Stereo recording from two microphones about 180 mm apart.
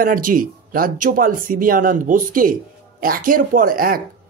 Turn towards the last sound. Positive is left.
turn(degrees=-55)  # may be behind; listen again after turning